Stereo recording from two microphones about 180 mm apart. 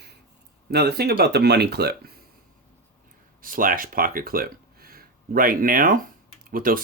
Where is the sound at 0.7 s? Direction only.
65° right (ahead or behind).